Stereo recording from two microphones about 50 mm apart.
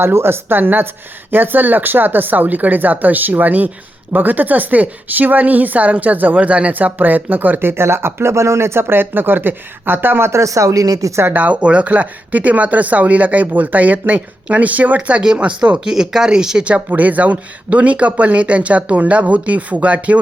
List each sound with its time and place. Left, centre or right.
0.0 s a woman's voice: right
10.2 s speech: right
11.3 s a woman's voice: right
15.8 s speech: centre
16.9 s speech: right